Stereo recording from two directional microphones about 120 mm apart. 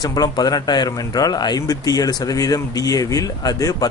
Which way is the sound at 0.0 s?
35° left (ahead or behind).